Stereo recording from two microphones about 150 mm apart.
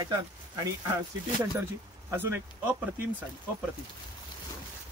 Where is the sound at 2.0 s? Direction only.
15° right (ahead or behind).